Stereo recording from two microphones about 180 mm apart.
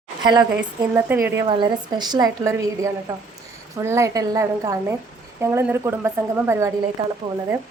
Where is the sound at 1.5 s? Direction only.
25° right (ahead or behind).